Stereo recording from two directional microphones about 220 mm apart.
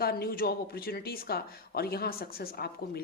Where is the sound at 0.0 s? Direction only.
45° left (ahead or behind).